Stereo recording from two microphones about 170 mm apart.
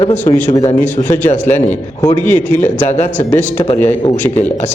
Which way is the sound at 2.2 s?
10° left (ahead or behind).